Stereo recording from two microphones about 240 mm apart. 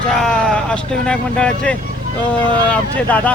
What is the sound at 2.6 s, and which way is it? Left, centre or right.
Speech, centre.